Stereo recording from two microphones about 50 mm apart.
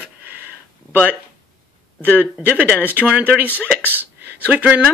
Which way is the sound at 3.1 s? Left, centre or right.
Right.